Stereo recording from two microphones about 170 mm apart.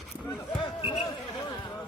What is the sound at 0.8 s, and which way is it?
Basketball bounce, 35° left (ahead or behind).